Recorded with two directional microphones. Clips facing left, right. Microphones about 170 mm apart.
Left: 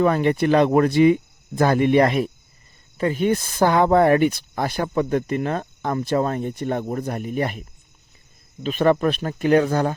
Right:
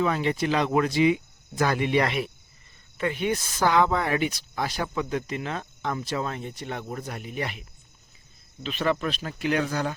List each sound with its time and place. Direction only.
0.0 s speech: 55° left (ahead or behind)
8.6 s speech: 50° left (ahead or behind)